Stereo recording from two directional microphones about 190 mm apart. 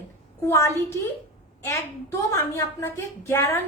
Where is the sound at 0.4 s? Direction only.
15° left (ahead or behind).